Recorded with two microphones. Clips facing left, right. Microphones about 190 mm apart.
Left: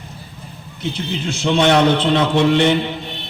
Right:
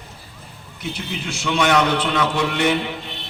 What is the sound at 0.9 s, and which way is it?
A man's voice, 25° left (ahead or behind).